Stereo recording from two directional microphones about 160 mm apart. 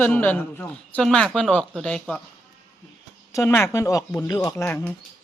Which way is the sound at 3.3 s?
15° left (ahead or behind).